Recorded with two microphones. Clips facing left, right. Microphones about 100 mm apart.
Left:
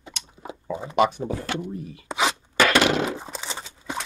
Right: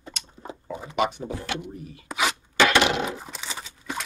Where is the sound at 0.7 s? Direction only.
25° left (ahead or behind).